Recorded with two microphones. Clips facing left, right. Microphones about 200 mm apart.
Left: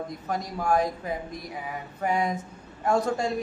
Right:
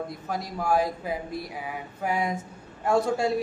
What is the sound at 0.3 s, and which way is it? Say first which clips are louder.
A man's voice: left 1 dB; 5° right (ahead or behind).